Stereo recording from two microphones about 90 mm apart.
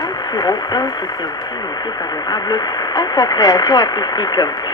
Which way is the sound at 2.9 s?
45° left (ahead or behind).